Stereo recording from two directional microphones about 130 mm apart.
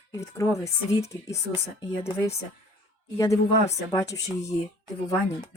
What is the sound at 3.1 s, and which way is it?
A woman's voice, 25° left (ahead or behind).